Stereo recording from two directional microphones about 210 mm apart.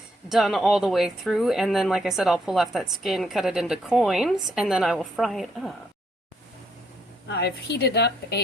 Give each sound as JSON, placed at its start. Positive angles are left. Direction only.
{"t": 0.3, "sound": "speech", "side_deg": 0}
{"t": 7.3, "sound": "a woman's voice", "side_deg": 50}